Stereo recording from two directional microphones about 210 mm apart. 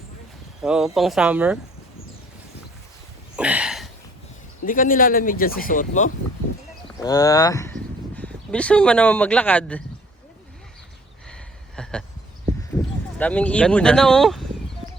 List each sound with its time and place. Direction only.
0.6 s speech: centre (ahead or behind)
3.3 s a sound: 5° right (ahead or behind)
4.6 s speech: 40° left (ahead or behind)
7.0 s cattle: 15° left (ahead or behind)
8.4 s speech: 5° left (ahead or behind)
11.8 s a sound: 5° left (ahead or behind)
13.1 s speech: 5° left (ahead or behind)